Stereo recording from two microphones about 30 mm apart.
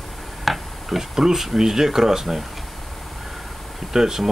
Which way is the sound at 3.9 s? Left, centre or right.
Centre.